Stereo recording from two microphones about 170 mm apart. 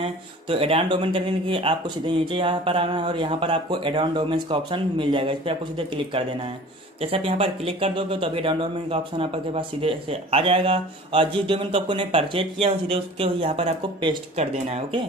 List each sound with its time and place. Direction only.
0.0 s speech: 30° right (ahead or behind)